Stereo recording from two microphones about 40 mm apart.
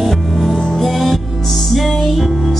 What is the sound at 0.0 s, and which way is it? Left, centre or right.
Music, centre.